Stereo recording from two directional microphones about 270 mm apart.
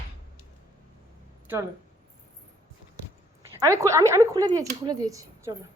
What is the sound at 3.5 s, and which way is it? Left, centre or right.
Speech, centre.